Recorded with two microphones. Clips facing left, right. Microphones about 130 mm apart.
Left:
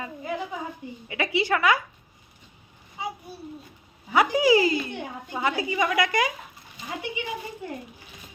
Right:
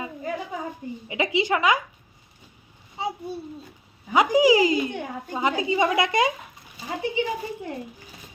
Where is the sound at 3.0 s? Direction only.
30° right (ahead or behind).